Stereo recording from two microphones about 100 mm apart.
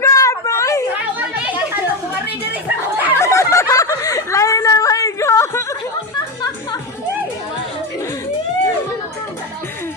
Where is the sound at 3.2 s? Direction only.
30° left (ahead or behind).